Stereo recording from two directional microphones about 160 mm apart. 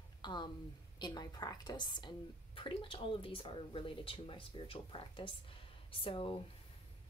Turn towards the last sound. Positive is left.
turn(degrees=35)  # may be behind; listen again after turning